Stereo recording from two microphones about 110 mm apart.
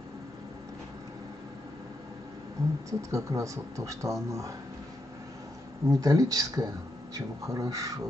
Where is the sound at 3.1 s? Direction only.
30° right (ahead or behind).